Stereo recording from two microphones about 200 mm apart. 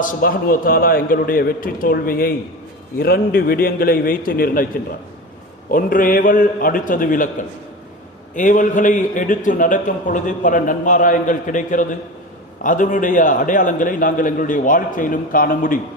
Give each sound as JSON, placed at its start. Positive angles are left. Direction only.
{"t": 0.0, "sound": "a man's voice", "side_deg": 45}
{"t": 5.7, "sound": "a man's voice", "side_deg": 45}